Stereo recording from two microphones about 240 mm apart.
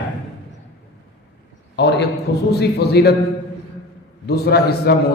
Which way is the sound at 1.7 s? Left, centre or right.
Left.